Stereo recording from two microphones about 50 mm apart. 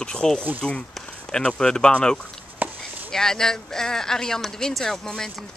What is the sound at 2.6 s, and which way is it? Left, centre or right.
Chopping, right.